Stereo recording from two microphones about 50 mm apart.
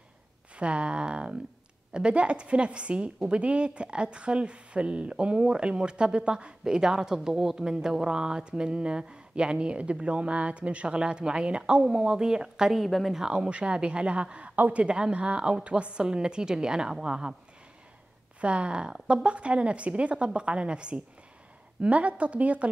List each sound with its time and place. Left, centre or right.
0.6 s speech: right
12.7 s speech: centre
13.2 s speech: centre
14.5 s a sound: right
14.8 s a woman's voice: centre
18.4 s speech: right